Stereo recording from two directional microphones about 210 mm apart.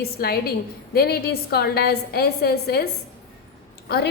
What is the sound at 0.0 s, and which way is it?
A woman's voice, 45° left (ahead or behind).